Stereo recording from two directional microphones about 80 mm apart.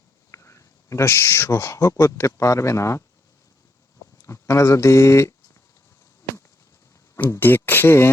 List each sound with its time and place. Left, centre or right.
0.3 s speech: left
4.2 s speech: left
7.3 s speech: left